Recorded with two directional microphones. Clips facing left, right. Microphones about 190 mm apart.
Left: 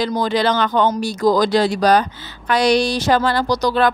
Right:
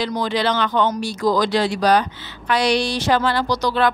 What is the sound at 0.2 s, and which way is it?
Speech, 45° left (ahead or behind).